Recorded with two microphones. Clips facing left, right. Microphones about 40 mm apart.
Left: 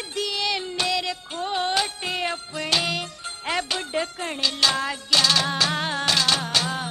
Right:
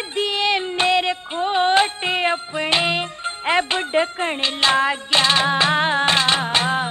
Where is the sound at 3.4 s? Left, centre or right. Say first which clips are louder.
Right 7 dB; right.